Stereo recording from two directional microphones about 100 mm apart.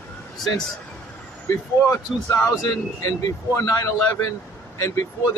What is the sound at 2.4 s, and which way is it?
Speech, 30° left (ahead or behind).